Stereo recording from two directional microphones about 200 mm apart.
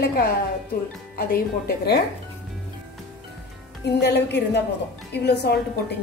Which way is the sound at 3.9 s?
55° left (ahead or behind).